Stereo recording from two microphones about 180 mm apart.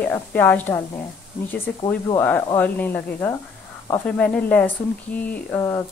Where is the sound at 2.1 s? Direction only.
10° left (ahead or behind).